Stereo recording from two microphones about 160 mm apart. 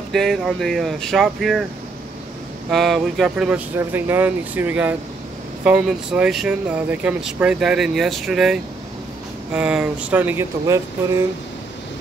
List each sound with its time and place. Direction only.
0.1 s speech: centre (ahead or behind)
2.7 s speech: centre (ahead or behind); by 11.2 s 15° right (ahead or behind)